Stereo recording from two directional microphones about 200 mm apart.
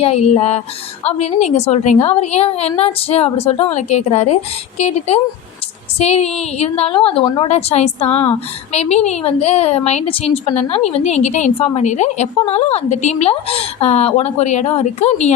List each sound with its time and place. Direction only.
0.0 s a woman's voice: 30° left (ahead or behind)